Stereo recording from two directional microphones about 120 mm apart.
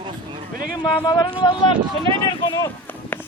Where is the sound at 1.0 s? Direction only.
35° left (ahead or behind).